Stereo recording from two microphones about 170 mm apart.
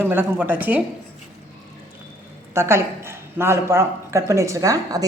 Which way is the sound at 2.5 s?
15° right (ahead or behind).